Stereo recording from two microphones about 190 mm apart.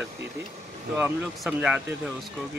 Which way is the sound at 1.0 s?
5° right (ahead or behind).